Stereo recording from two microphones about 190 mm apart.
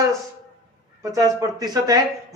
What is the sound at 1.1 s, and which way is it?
Speech, 20° right (ahead or behind).